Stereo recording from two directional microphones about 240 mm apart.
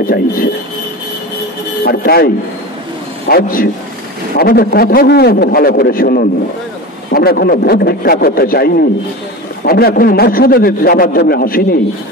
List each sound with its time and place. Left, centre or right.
0.0 s a man's voice: left
1.9 s a man's voice: left